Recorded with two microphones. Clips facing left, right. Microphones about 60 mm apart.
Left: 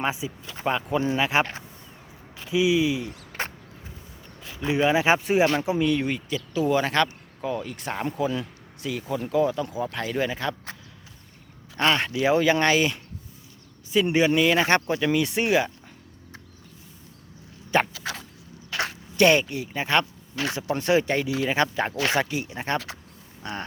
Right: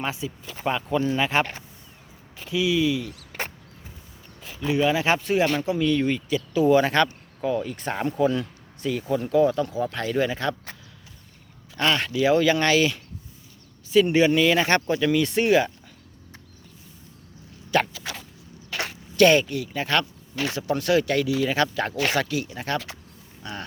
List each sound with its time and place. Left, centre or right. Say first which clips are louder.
0.0 s speech: left 2 dB; centre
2.5 s speech: left 1 dB; centre
4.6 s speech: left 1 dB; left
6.5 s speech: right 4 dB; centre
11.8 s speech: even; centre
17.7 s a sound: even; left
19.1 s speech: right 2 dB; centre